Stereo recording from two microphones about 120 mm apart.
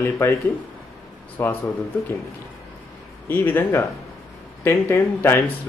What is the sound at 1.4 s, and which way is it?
Speech, 20° left (ahead or behind).